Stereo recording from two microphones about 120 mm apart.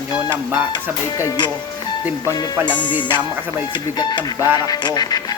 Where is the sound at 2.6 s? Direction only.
40° left (ahead or behind).